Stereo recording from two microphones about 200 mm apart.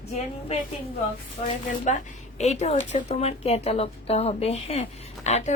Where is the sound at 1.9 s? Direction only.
35° left (ahead or behind).